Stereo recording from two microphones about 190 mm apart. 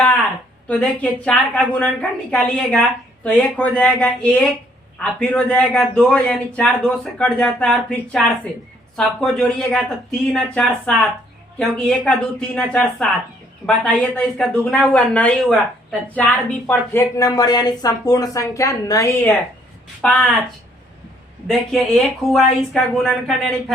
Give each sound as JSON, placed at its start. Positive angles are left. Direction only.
{"t": 0.7, "sound": "a man's voice", "side_deg": 5}
{"t": 21.4, "sound": "a man's voice", "side_deg": 0}